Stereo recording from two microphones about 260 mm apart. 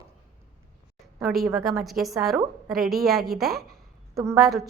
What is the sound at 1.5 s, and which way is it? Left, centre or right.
A woman's voice, centre.